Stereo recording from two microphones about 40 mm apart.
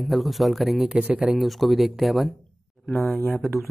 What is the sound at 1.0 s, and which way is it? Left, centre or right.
Speech, right.